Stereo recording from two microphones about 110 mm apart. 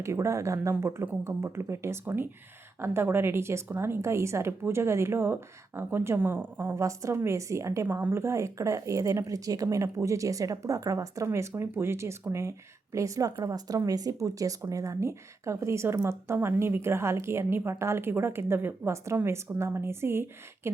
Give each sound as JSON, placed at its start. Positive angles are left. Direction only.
{"t": 0.0, "sound": "speech", "side_deg": -25}